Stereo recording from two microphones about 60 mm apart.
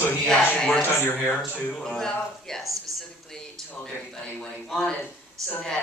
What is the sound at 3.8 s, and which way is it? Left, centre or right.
A man's voice, centre.